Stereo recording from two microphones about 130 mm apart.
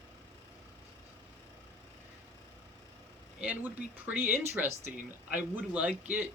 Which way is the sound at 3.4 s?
10° right (ahead or behind).